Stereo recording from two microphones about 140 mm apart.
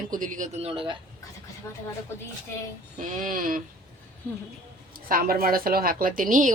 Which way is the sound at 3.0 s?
70° right (ahead or behind).